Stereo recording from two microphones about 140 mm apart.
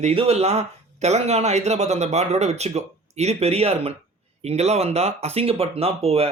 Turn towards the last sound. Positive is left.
turn(degrees=-45)  # may be behind; listen again after turning